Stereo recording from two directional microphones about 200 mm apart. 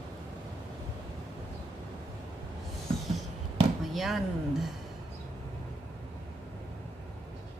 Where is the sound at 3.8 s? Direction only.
Centre (ahead or behind).